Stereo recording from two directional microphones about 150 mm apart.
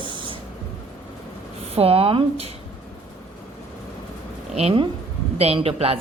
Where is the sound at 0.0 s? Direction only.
35° right (ahead or behind).